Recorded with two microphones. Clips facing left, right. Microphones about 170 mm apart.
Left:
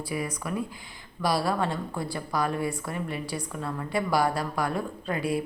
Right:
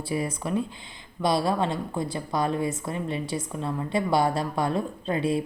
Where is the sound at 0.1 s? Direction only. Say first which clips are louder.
Right 5 dB; 25° right (ahead or behind).